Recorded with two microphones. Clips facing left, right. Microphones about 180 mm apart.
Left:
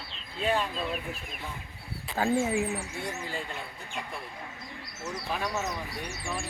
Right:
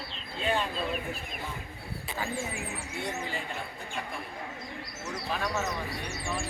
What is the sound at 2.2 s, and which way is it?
Speech, 50° left (ahead or behind).